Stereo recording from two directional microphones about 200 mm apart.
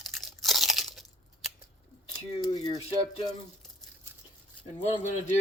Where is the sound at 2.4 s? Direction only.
20° left (ahead or behind).